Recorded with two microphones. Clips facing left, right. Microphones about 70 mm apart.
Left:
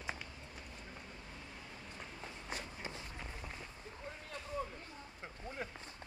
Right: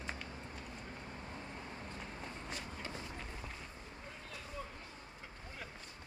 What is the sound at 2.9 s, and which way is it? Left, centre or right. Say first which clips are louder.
Run: right 2 dB; centre.